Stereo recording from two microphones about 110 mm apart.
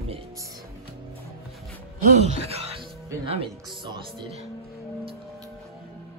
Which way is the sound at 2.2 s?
70° right (ahead or behind).